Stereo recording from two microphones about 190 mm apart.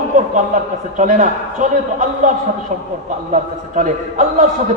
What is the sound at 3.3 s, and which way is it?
Speech, 40° right (ahead or behind).